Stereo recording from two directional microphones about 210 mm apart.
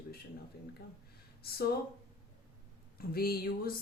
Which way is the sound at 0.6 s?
50° left (ahead or behind).